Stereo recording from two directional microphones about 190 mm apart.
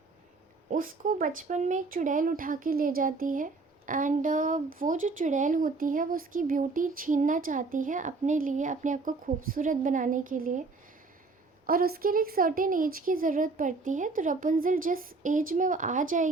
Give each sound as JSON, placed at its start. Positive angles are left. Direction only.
{"t": 0.7, "sound": "speech", "side_deg": -45}
{"t": 11.6, "sound": "speech", "side_deg": -50}